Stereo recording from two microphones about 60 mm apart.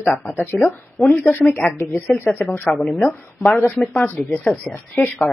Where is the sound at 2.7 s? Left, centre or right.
Centre.